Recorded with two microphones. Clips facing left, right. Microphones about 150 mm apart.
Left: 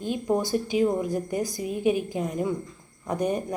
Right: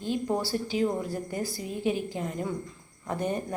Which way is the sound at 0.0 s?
15° left (ahead or behind).